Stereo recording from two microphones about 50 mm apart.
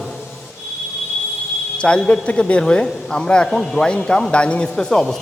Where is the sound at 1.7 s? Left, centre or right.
Centre.